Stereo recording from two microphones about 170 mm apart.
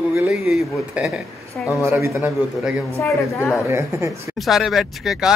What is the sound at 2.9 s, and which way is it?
Speech, 15° left (ahead or behind).